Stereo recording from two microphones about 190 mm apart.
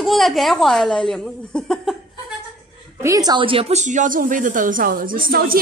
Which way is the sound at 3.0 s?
20° right (ahead or behind).